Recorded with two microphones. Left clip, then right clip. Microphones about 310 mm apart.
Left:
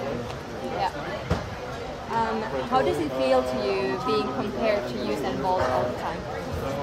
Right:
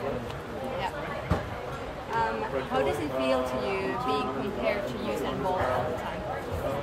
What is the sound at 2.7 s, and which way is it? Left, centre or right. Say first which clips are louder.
Speech: left 5 dB; left.